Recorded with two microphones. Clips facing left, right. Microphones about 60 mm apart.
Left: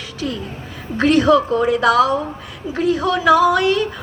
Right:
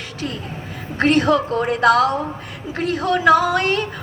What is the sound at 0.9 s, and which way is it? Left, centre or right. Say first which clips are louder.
A woman's voice: left 3 dB; right.